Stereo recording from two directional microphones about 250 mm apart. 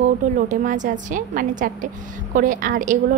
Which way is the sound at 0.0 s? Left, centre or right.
Right.